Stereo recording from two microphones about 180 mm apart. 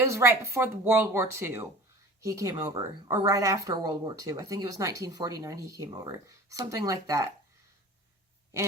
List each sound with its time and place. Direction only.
0.1 s speech: 15° right (ahead or behind)